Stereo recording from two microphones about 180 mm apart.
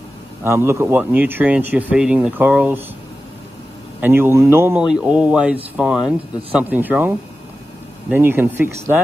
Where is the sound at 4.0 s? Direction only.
10° right (ahead or behind).